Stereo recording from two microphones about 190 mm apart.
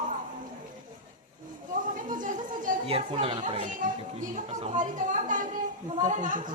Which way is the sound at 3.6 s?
45° right (ahead or behind).